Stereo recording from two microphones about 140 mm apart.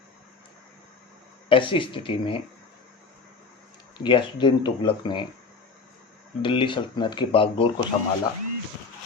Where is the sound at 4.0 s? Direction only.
35° left (ahead or behind).